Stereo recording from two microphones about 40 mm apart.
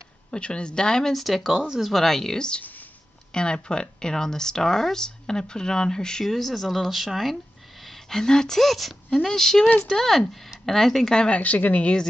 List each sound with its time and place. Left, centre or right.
0.3 s speech: left
1.1 s speech: centre
6.2 s speech: centre
8.6 s speech: centre
11.2 s a woman's voice: left